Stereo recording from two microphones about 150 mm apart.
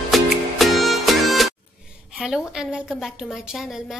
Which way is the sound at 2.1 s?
5° right (ahead or behind).